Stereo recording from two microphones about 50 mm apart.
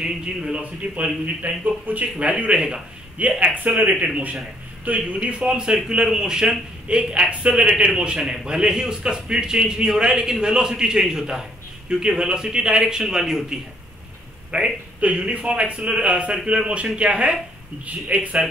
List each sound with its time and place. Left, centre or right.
0.0 s a man's voice: centre
0.6 s a man's voice: right
5.4 s a man's voice: centre
14.5 s a man's voice: right